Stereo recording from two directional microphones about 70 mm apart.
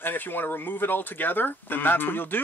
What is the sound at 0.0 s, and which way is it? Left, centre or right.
Speech, left.